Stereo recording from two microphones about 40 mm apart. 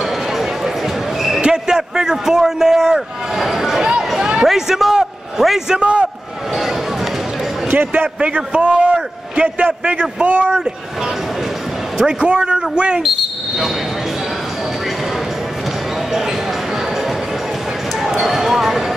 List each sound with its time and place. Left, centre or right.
1.4 s a sound: centre
4.2 s a sound: centre
5.7 s a man's voice: right
8.2 s a man's voice: right
9.7 s a man's voice: right
10.2 s speech: right
12.0 s a man's voice: centre
18.2 s basketball bounce: centre